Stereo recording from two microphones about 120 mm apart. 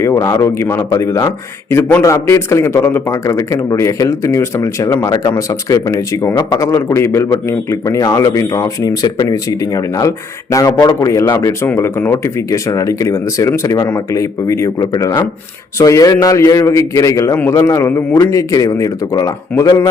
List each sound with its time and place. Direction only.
0.0 s speech: 25° left (ahead or behind)